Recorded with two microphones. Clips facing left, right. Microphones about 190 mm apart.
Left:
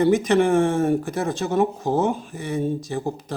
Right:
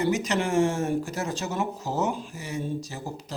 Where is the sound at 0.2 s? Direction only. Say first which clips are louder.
Left 6 dB; 55° left (ahead or behind).